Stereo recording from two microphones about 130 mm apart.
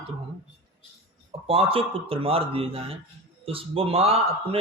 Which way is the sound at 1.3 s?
45° right (ahead or behind).